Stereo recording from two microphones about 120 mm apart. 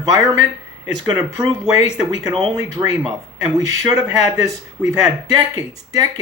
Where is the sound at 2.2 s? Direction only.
35° right (ahead or behind).